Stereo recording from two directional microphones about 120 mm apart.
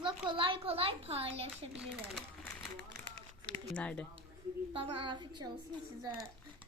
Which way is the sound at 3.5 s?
10° left (ahead or behind).